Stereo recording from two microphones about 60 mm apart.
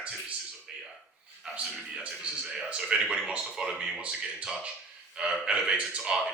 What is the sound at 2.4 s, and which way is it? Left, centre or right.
Speech, centre.